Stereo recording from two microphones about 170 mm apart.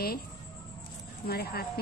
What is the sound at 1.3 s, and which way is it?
Speech, 65° left (ahead or behind).